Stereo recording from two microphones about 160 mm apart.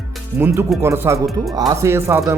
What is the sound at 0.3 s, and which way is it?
Speech, 15° right (ahead or behind).